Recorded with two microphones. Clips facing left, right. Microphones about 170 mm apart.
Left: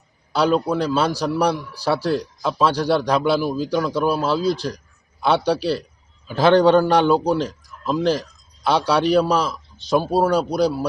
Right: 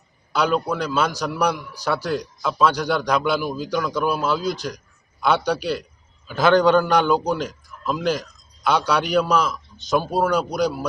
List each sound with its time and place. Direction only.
0.3 s a man's voice: 30° left (ahead or behind)